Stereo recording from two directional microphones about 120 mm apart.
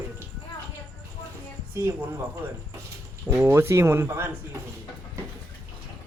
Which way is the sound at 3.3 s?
20° right (ahead or behind).